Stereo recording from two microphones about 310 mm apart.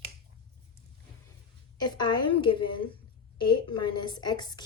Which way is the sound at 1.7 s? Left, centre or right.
Centre.